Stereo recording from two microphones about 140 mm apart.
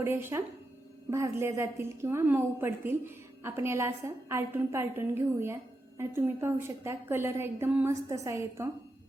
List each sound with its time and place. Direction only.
0.0 s a woman's voice: 15° right (ahead or behind)